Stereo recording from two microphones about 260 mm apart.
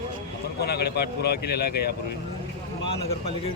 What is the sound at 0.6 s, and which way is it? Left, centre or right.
Speech, left.